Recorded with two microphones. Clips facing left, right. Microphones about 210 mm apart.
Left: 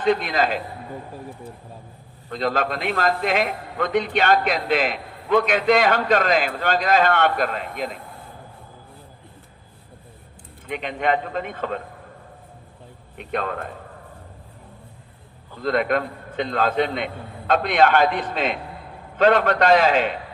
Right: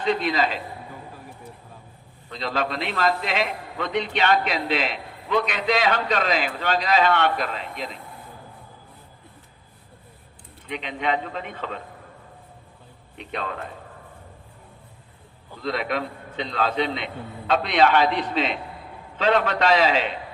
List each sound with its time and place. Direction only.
0.0 s a man's voice: 50° left (ahead or behind)
2.3 s a man's voice: 50° left (ahead or behind)
10.7 s a man's voice: 50° left (ahead or behind)
13.1 s a man's voice: 50° left (ahead or behind)
15.6 s a man's voice: 50° left (ahead or behind)